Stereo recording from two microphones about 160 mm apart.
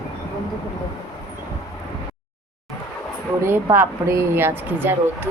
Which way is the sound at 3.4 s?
15° right (ahead or behind).